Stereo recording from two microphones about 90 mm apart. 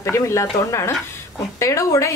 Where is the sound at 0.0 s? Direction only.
30° left (ahead or behind).